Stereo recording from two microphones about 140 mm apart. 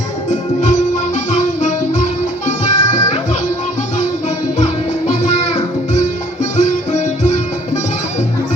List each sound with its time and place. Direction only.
0.3 s music: 60° left (ahead or behind)
4.5 s music: 55° left (ahead or behind)